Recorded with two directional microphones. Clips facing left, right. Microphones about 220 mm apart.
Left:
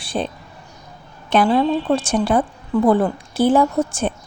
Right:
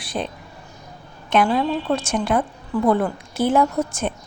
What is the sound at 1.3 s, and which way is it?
A woman's voice, 35° left (ahead or behind).